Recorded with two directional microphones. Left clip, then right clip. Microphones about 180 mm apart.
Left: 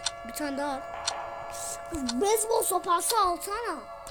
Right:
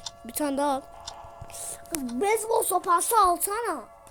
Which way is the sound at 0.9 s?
25° left (ahead or behind).